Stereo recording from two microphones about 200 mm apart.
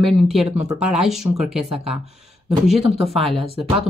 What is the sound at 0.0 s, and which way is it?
Speech, centre (ahead or behind).